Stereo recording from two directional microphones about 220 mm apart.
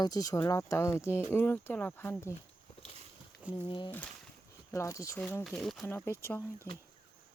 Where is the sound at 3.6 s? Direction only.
20° left (ahead or behind).